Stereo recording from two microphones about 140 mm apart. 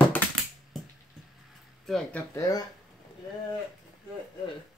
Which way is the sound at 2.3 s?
25° left (ahead or behind).